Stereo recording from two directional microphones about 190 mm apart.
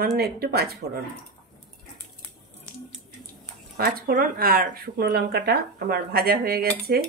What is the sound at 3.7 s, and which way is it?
Speech, 55° right (ahead or behind).